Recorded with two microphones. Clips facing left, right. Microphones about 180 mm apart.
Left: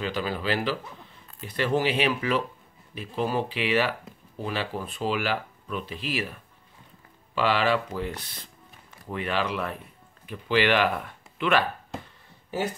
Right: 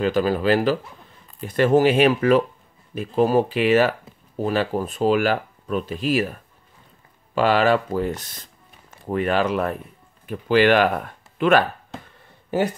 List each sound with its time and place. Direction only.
0.0 s speech: 45° right (ahead or behind)
7.3 s speech: 45° right (ahead or behind)